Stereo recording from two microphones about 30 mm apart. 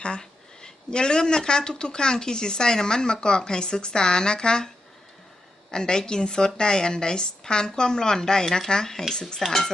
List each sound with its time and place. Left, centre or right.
0.9 s speech: left
5.7 s speech: left
8.4 s speech: centre
8.7 s speech: centre
9.4 s speech: centre